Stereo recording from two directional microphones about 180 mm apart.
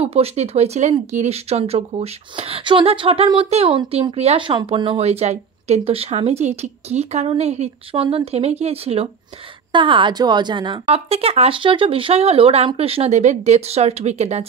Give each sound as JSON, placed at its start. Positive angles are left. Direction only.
{"t": 0.0, "sound": "speech", "side_deg": -35}